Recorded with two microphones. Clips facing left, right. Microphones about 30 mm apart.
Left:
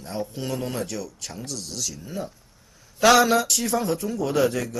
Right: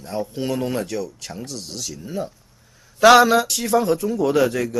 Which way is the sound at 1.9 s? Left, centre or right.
Centre.